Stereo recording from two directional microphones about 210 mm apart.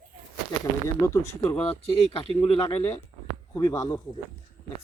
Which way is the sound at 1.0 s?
15° left (ahead or behind).